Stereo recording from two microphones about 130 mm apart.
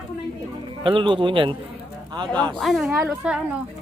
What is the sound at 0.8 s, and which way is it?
Speech, 40° right (ahead or behind).